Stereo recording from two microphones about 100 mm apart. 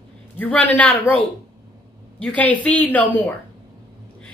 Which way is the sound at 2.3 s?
15° left (ahead or behind).